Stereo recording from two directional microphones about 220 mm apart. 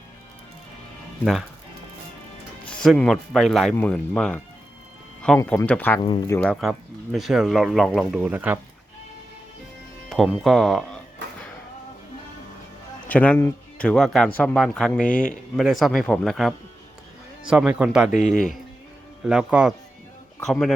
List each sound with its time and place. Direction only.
1.2 s speech: centre (ahead or behind)
2.6 s speech: 5° left (ahead or behind)
5.4 s speech: 10° left (ahead or behind)
6.0 s speech: 20° left (ahead or behind)
6.4 s speech: centre (ahead or behind)
10.1 s music: centre (ahead or behind)
13.1 s speech: 5° left (ahead or behind)
15.0 s speech: 40° left (ahead or behind)
15.3 s speech: centre (ahead or behind)
19.3 s speech: 5° right (ahead or behind)